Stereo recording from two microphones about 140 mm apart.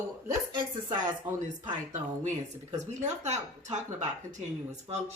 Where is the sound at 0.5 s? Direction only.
35° right (ahead or behind).